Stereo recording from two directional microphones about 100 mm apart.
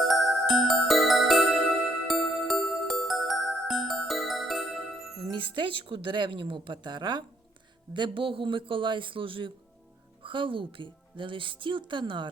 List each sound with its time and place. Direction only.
0.1 s music: centre (ahead or behind)
5.3 s speech: 55° right (ahead or behind)